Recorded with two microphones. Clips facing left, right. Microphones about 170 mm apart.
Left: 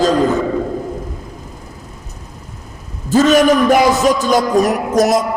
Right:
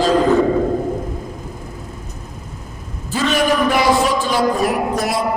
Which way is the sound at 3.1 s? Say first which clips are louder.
Left 7 dB; 45° left (ahead or behind).